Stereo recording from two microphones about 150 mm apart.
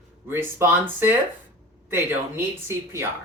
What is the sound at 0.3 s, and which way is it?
Speech, 15° right (ahead or behind).